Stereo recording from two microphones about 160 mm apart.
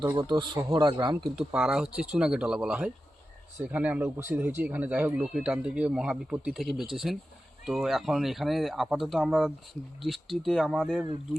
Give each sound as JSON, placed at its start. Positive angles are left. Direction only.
{"t": 0.2, "sound": "speech", "side_deg": -30}
{"t": 1.4, "sound": "speech", "side_deg": -5}